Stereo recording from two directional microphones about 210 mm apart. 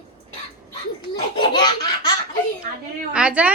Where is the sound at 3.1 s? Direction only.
5° right (ahead or behind).